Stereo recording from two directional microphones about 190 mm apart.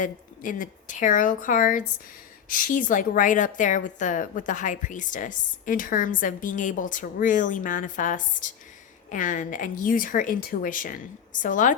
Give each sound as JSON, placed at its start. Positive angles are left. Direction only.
{"t": 0.0, "sound": "a woman's voice", "side_deg": 45}